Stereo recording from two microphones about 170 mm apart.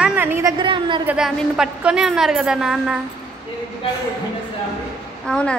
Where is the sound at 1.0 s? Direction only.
5° right (ahead or behind).